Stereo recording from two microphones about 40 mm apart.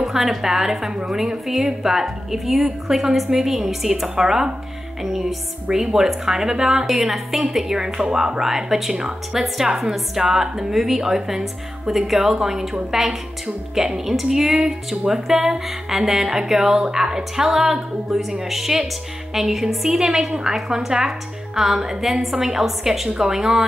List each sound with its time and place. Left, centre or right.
0.0 s a woman's voice: centre
7.0 s a woman's voice: centre